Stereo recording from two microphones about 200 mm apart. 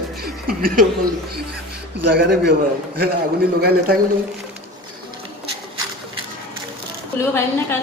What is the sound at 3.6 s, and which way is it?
Speech, 50° right (ahead or behind).